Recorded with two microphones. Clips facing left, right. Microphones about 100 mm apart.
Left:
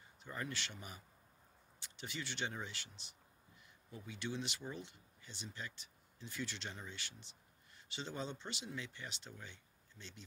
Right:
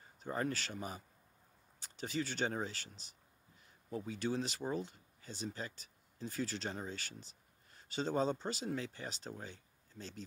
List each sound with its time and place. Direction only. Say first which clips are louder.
0.0 s speech: right 8 dB; 40° right (ahead or behind)